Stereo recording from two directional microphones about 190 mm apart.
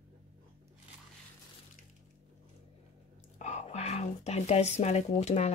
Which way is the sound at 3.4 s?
35° left (ahead or behind).